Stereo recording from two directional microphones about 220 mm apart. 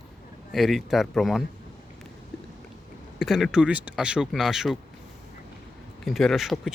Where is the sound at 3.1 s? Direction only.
Centre (ahead or behind).